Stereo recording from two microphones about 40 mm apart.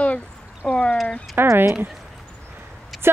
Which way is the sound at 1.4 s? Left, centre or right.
Right.